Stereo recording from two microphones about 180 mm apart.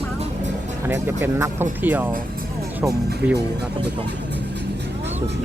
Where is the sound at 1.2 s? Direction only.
10° right (ahead or behind).